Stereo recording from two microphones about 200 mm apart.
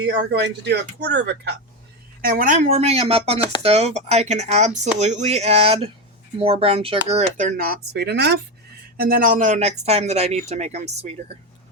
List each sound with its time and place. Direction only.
0.3 s speech: 60° right (ahead or behind)
2.2 s speech: 45° right (ahead or behind)
2.6 s speech: 30° right (ahead or behind)
7.3 s speech: 45° right (ahead or behind)
9.0 s speech: 45° right (ahead or behind)